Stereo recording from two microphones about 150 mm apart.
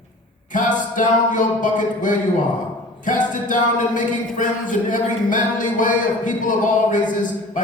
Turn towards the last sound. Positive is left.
turn(degrees=60)  # may be behind; listen again after turning